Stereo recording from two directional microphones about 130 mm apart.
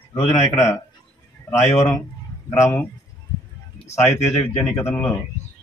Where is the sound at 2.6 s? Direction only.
20° left (ahead or behind).